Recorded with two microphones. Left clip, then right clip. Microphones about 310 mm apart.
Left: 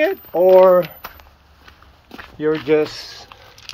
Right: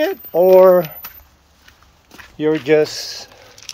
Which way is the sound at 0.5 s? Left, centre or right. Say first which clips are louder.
Right 1 dB; right.